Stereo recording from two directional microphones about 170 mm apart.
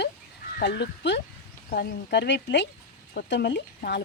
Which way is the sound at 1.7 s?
70° left (ahead or behind).